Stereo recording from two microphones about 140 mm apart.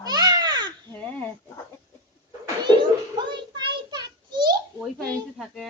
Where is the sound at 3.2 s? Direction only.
35° right (ahead or behind).